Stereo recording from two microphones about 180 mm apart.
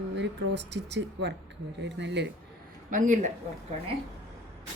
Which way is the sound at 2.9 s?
45° right (ahead or behind).